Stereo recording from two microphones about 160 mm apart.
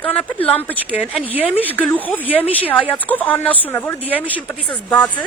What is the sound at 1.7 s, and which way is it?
Speech, 10° left (ahead or behind).